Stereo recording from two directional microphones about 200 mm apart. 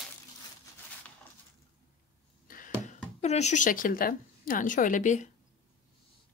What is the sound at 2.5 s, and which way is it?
Speech, 40° left (ahead or behind).